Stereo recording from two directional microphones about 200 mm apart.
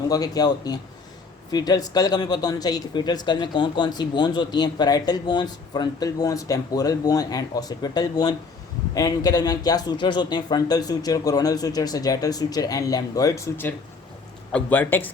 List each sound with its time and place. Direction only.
0.1 s speech: 20° left (ahead or behind)